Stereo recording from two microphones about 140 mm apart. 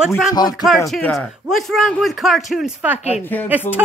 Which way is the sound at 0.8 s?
Centre (ahead or behind).